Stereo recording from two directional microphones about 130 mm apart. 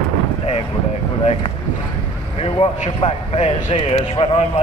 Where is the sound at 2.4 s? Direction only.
55° left (ahead or behind).